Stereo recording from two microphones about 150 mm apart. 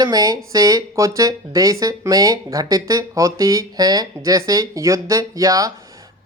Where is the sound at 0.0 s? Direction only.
25° right (ahead or behind).